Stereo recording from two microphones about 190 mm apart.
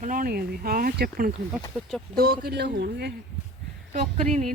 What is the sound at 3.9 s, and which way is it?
Speech, 35° right (ahead or behind).